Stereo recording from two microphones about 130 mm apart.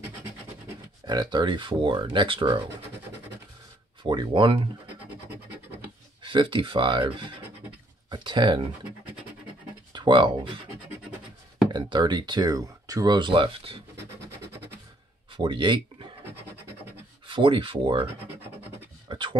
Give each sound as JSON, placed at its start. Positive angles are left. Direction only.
{"t": 1.0, "sound": "speech", "side_deg": -35}
{"t": 4.0, "sound": "speech", "side_deg": -40}
{"t": 6.2, "sound": "speech", "side_deg": -40}
{"t": 8.1, "sound": "a sound", "side_deg": -40}
{"t": 9.9, "sound": "speech", "side_deg": -35}
{"t": 11.7, "sound": "speech", "side_deg": -35}
{"t": 15.3, "sound": "speech", "side_deg": -40}
{"t": 17.3, "sound": "speech", "side_deg": -40}
{"t": 19.0, "sound": "a sound", "side_deg": -40}